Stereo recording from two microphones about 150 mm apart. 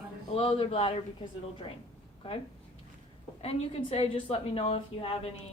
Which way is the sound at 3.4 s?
40° left (ahead or behind).